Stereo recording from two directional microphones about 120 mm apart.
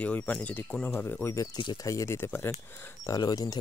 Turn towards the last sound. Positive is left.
turn(degrees=30)  # may be behind; listen again after turning